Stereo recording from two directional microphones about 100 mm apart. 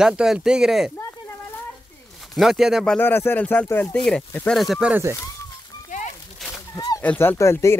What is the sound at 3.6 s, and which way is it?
Speech, 30° left (ahead or behind).